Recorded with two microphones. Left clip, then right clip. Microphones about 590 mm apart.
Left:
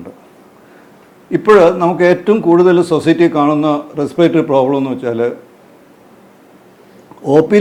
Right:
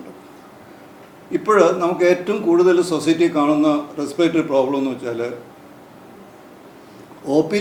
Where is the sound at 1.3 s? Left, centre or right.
Left.